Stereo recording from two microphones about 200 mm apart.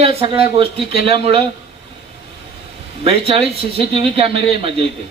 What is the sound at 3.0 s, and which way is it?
A man's voice, 30° right (ahead or behind).